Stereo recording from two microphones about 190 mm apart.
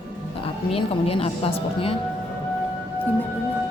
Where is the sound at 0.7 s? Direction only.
30° left (ahead or behind).